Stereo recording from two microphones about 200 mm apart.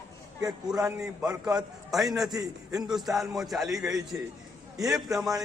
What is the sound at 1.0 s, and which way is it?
Speech, 20° right (ahead or behind).